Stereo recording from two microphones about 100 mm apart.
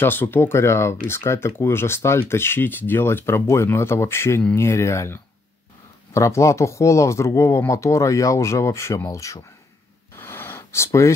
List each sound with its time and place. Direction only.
0.0 s speech: 20° left (ahead or behind)
10.1 s gasp: 25° left (ahead or behind)